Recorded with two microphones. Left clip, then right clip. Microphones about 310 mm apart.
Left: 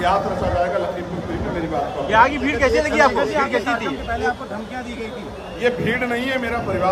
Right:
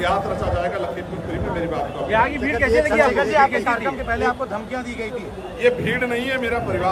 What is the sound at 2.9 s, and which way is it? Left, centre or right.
Speech, right.